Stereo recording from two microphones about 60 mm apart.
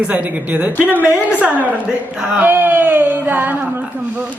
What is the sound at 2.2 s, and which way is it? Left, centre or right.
Speech, centre.